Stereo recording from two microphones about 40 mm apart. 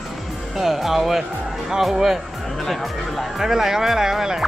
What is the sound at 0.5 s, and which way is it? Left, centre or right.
Speech, centre.